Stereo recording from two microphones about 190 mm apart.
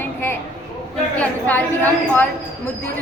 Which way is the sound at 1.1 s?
5° left (ahead or behind).